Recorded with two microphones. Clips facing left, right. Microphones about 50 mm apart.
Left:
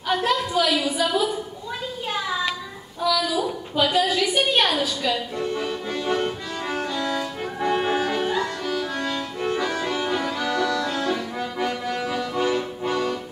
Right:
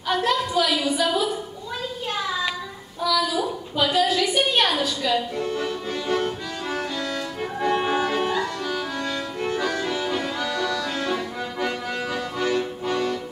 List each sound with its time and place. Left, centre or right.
0.1 s a woman's voice: centre
3.0 s a sound: centre
6.0 s music: left
6.7 s music: centre
9.9 s accordion: centre
11.0 s accordion: right
11.9 s music: centre
12.4 s music: left